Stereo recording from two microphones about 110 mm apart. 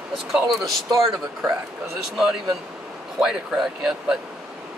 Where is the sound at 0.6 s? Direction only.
Centre (ahead or behind).